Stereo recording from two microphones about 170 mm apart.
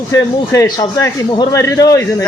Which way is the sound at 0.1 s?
20° left (ahead or behind).